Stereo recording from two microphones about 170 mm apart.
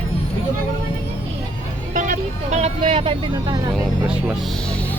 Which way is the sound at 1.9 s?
50° right (ahead or behind).